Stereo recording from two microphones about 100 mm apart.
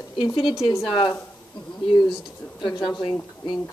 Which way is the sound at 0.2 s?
55° left (ahead or behind).